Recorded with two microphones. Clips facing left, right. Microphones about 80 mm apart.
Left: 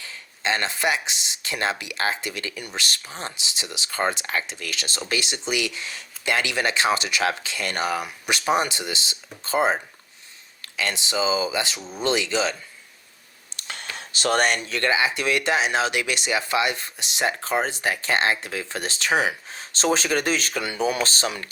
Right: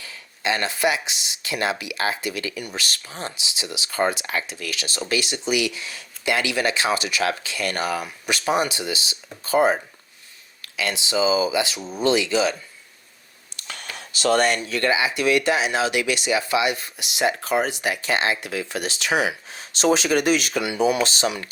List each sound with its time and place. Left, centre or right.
0.0 s speech: left
2.7 s speech: left
3.8 s speech: left
11.8 s speech: centre
12.0 s speech: left
13.7 s a sound: left
14.8 s speech: left